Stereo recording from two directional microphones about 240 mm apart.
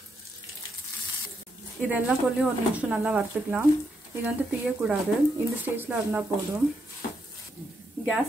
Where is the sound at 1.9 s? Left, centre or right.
Centre.